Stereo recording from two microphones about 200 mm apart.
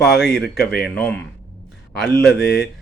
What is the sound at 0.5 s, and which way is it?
Speech, 55° left (ahead or behind).